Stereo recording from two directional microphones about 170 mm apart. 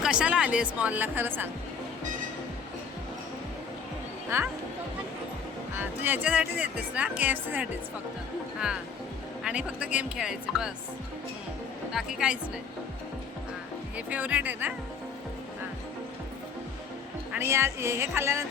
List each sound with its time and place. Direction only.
0.0 s speech: 5° right (ahead or behind)
4.3 s speech: 15° right (ahead or behind)
5.7 s speech: 10° right (ahead or behind)
9.4 s speech: 5° right (ahead or behind)
11.9 s speech: 5° right (ahead or behind)
13.9 s speech: 10° right (ahead or behind)
17.3 s speech: 15° right (ahead or behind)